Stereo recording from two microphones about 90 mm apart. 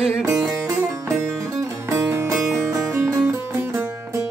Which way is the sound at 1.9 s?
30° right (ahead or behind).